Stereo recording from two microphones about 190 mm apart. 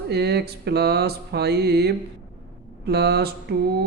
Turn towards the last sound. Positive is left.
turn(degrees=-55)  # may be behind; listen again after turning